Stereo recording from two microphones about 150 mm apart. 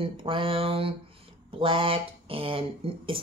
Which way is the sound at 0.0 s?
35° right (ahead or behind).